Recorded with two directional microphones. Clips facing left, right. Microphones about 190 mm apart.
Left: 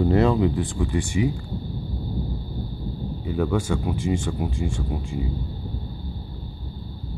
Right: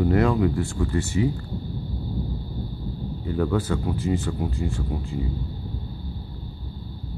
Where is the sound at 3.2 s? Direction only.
15° left (ahead or behind).